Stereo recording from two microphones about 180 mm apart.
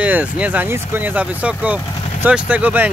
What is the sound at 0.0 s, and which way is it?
Speech, 10° right (ahead or behind).